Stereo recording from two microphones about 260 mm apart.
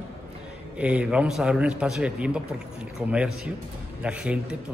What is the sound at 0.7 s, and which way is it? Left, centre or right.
A man's voice, centre.